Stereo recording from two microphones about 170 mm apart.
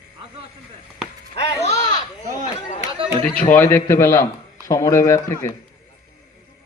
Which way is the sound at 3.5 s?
10° left (ahead or behind).